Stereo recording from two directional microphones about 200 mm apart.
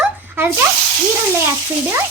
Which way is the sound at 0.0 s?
10° right (ahead or behind).